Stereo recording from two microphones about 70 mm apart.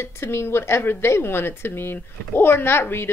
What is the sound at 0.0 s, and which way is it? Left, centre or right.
Speech, left.